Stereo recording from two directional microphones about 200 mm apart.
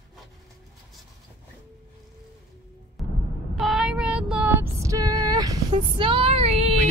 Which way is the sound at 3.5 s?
Centre (ahead or behind).